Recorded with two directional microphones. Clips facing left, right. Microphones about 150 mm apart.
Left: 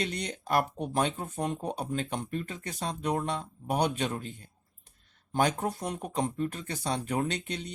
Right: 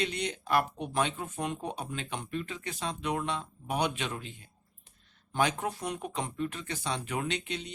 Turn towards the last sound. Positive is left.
turn(degrees=45)  # may be behind; listen again after turning